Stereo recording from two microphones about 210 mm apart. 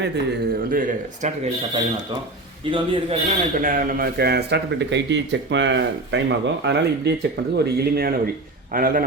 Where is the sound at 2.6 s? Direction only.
25° right (ahead or behind).